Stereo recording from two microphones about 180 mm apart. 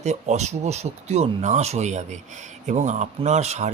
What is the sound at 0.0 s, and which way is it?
Speech, 40° right (ahead or behind).